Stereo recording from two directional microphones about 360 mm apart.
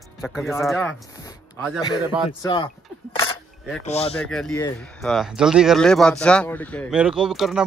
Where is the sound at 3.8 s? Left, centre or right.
Centre.